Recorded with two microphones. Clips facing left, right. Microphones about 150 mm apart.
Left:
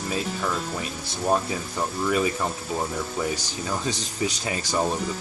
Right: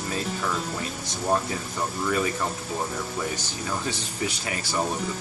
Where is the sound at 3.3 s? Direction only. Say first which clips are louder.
Left 1 dB; 15° left (ahead or behind).